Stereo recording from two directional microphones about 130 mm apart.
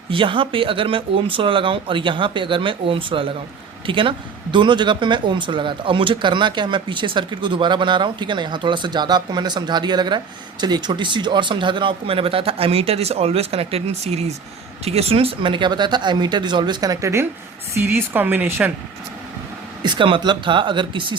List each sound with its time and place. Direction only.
0.1 s speech: 40° right (ahead or behind); by 18.7 s 15° right (ahead or behind)
19.8 s speech: 35° right (ahead or behind)